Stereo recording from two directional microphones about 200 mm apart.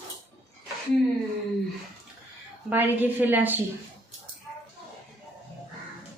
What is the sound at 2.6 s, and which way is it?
Speech, 10° right (ahead or behind).